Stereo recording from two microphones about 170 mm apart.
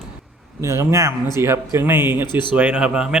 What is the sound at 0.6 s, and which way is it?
A man's voice, 15° right (ahead or behind).